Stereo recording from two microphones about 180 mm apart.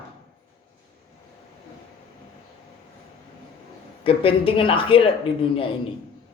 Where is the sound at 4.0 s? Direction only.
30° left (ahead or behind).